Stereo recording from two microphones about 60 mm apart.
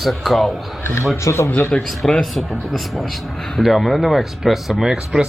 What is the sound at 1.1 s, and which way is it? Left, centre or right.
Speech, left.